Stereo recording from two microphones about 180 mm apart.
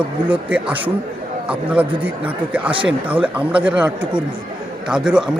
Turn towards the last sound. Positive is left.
turn(degrees=-5)  # may be behind; listen again after turning